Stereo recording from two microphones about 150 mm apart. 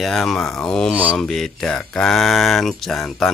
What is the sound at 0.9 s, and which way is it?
Mantra, 10° right (ahead or behind).